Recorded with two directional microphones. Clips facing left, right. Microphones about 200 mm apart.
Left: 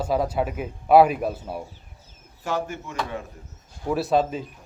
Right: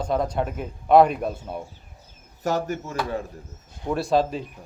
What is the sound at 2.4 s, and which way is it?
Speech, 40° right (ahead or behind).